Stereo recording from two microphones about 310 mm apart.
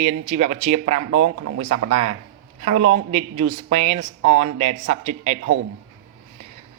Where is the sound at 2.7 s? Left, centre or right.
Right.